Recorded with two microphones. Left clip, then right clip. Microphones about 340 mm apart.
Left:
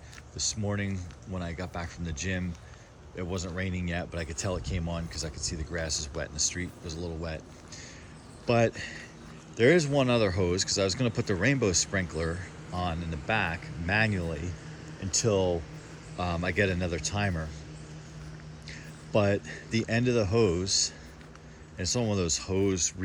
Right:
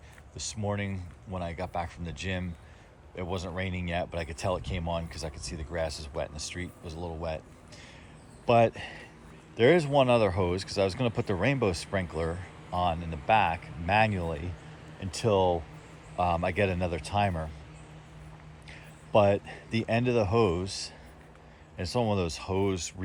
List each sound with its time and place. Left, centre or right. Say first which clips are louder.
0.3 s speech: left 6 dB; right
0.6 s speech: right 1 dB; centre
3.2 s speech: right 1 dB; centre
3.7 s speech: even; right
3.9 s speech: right 5 dB; centre
6.6 s speech: left 2 dB; right
8.4 s speech: right 3 dB; centre
18.7 s a sound: right 3 dB; centre
19.9 s speech: right 1 dB; centre